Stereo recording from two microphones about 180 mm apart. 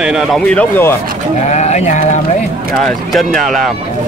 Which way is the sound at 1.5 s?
40° left (ahead or behind).